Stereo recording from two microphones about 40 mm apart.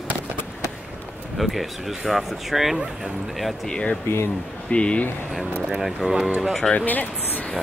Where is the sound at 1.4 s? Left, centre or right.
Centre.